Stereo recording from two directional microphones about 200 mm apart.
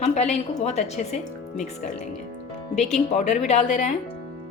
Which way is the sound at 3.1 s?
35° left (ahead or behind).